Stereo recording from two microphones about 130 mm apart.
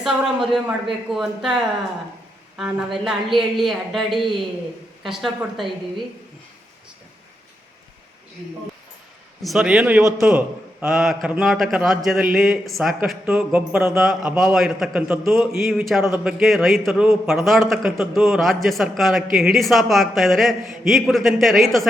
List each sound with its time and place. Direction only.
0.0 s a man's voice: 5° right (ahead or behind)
2.6 s a man's voice: 5° right (ahead or behind)
9.4 s a man's voice: centre (ahead or behind)
13.2 s speech: 15° right (ahead or behind)
13.9 s a man's voice: centre (ahead or behind)